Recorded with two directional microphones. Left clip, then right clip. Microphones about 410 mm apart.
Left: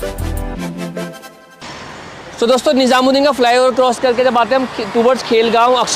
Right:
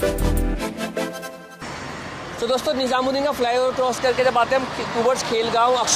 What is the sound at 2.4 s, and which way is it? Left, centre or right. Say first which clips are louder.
Speech: left 9 dB; left.